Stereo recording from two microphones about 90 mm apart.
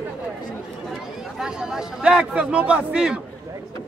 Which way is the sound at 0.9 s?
5° right (ahead or behind).